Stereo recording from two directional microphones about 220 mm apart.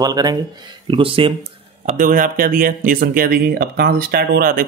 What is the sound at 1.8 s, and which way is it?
Speech, 40° right (ahead or behind).